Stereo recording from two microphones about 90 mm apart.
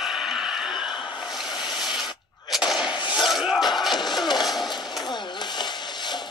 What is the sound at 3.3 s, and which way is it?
Music, 5° right (ahead or behind).